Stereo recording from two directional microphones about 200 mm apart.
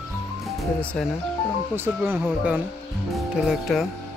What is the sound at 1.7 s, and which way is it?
Speech, 10° right (ahead or behind).